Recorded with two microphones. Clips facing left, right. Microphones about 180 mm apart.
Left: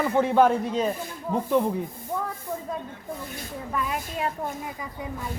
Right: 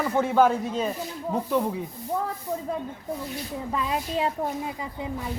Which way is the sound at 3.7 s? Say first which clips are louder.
Right 2 dB; 25° right (ahead or behind).